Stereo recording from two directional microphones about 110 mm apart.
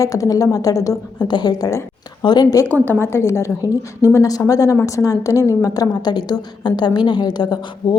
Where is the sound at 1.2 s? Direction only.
40° left (ahead or behind).